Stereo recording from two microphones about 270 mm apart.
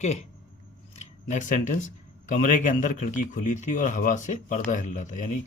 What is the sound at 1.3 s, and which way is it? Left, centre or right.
A man's voice, left.